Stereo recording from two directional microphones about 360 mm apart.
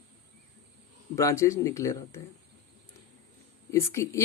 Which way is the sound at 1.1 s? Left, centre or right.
Centre.